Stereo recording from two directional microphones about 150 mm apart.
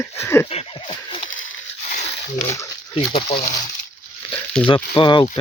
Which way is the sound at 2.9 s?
40° left (ahead or behind).